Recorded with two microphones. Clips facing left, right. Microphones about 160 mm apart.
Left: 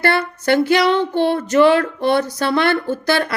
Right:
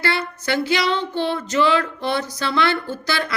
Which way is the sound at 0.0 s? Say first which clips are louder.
Left 6 dB; 55° left (ahead or behind).